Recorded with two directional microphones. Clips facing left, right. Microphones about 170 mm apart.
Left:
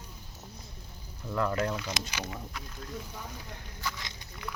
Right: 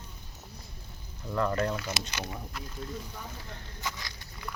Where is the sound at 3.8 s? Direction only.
20° right (ahead or behind).